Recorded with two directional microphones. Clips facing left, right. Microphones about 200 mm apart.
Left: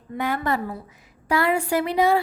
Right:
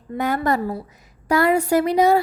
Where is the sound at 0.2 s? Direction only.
40° right (ahead or behind).